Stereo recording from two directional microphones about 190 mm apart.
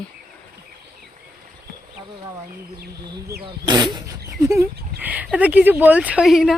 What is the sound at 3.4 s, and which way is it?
Speech, 25° right (ahead or behind).